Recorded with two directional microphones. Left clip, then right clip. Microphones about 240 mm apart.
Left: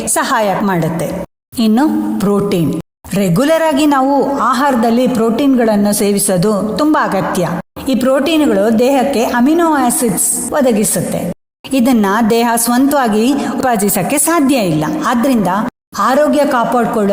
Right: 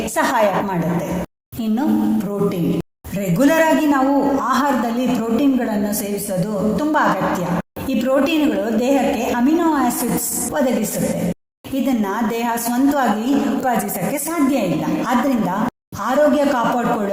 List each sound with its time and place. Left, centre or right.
0.2 s a woman's voice: left
11.7 s a woman's voice: left